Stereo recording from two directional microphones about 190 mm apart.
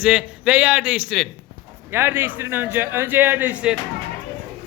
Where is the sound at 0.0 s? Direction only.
5° right (ahead or behind).